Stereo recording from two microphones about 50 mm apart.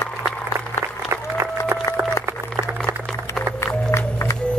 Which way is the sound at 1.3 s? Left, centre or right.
Right.